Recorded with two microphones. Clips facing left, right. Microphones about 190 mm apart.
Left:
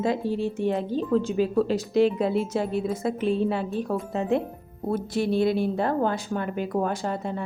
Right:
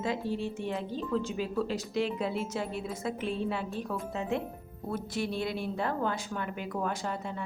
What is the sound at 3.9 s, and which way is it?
Speech, 55° left (ahead or behind).